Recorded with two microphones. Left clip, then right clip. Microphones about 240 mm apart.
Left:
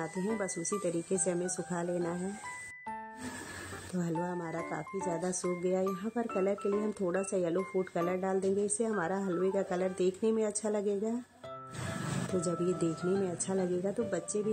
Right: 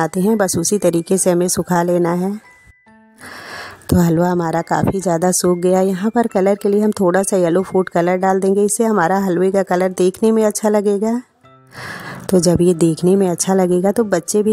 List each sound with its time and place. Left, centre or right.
0.0 s speech: right
4.0 s speech: right
12.4 s speech: right